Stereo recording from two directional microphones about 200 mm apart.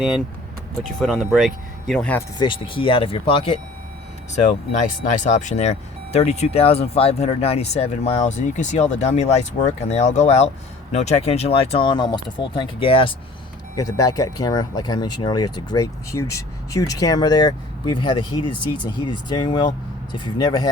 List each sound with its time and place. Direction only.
0.8 s speech: centre (ahead or behind)
2.4 s speech: 25° left (ahead or behind)
5.0 s speech: 40° left (ahead or behind); by 20.7 s 20° left (ahead or behind)